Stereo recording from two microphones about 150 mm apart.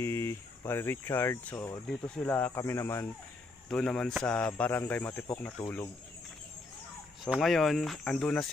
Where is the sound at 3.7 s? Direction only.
5° left (ahead or behind).